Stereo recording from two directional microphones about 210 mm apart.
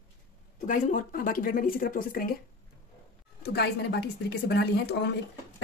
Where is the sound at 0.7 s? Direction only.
35° left (ahead or behind).